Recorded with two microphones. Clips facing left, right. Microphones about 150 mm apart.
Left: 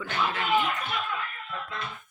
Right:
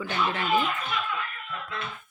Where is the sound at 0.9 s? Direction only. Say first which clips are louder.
Right 1 dB; 45° left (ahead or behind).